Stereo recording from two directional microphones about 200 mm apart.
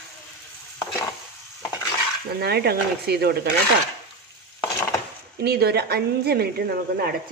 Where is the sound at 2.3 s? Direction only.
55° right (ahead or behind).